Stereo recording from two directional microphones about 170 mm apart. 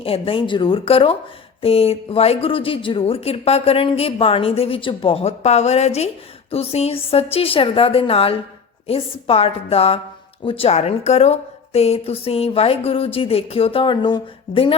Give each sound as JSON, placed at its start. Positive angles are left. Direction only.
{"t": 0.0, "sound": "speech", "side_deg": 35}